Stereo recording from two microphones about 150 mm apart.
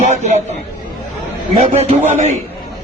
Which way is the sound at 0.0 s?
55° right (ahead or behind).